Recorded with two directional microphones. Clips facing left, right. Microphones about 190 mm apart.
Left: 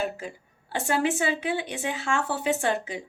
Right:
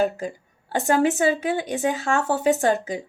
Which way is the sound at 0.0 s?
40° right (ahead or behind).